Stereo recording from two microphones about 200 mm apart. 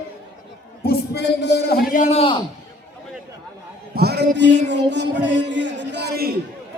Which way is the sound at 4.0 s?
55° right (ahead or behind).